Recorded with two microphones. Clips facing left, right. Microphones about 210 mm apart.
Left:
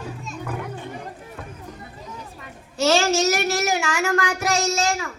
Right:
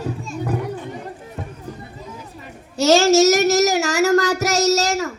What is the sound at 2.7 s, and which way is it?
Child singing, 40° right (ahead or behind).